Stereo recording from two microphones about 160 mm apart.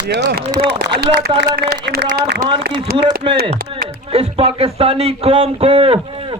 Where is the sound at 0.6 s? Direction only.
90° right.